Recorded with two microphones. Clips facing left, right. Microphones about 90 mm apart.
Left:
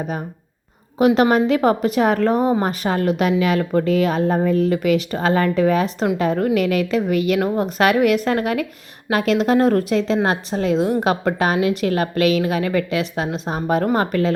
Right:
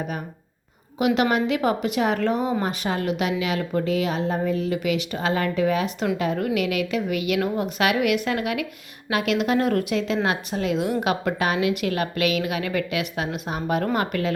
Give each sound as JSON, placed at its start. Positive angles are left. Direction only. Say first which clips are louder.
{"t": 0.9, "sound": "speech", "louder": "left 6 dB", "side_deg": 35}